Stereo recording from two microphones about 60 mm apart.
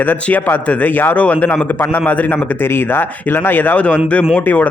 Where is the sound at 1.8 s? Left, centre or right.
Left.